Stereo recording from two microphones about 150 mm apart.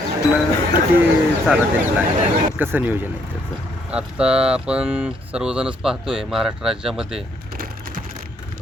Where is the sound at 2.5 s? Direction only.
15° right (ahead or behind).